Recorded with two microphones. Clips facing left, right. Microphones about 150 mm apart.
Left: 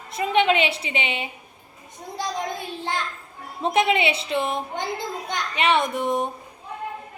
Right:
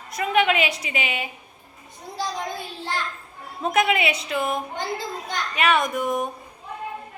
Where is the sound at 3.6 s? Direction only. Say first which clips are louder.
Left 1 dB; 25° left (ahead or behind).